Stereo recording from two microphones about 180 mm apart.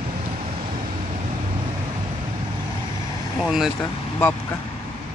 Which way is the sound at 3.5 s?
5° right (ahead or behind).